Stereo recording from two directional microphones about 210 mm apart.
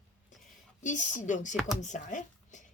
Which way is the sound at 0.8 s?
35° left (ahead or behind).